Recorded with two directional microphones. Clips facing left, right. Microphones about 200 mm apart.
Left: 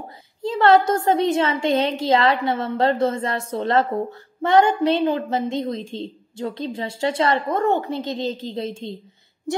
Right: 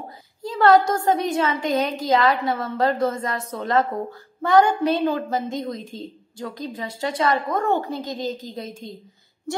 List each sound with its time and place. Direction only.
0.4 s a woman's voice: 25° left (ahead or behind)